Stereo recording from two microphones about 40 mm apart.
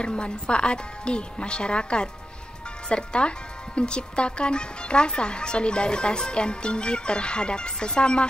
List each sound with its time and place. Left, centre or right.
0.0 s speech: left